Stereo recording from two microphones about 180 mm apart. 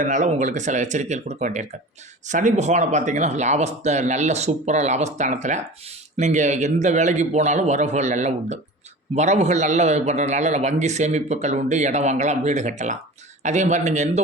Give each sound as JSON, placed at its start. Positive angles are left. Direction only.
{"t": 0.0, "sound": "a man's voice", "side_deg": -45}